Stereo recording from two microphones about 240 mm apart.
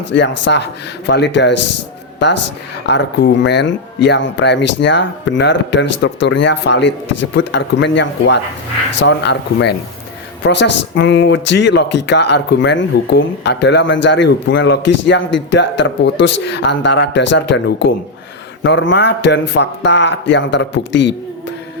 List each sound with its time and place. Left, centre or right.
0.1 s a woman's voice: left